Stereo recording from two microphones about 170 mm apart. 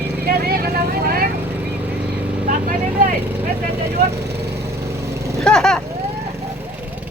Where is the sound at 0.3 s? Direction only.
65° right (ahead or behind).